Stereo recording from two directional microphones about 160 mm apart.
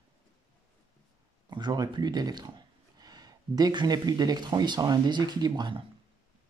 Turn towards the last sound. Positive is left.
turn(degrees=-25)  # may be behind; listen again after turning